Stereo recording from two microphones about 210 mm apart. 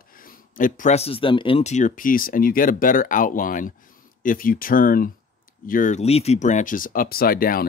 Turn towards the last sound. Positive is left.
turn(degrees=45)  # may be behind; listen again after turning